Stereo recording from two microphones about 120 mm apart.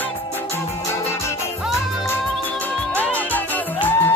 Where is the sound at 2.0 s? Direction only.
15° left (ahead or behind).